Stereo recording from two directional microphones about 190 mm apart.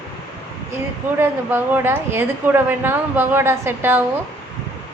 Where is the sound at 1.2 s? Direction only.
10° right (ahead or behind).